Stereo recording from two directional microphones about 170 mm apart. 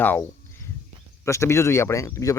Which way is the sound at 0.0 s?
10° left (ahead or behind).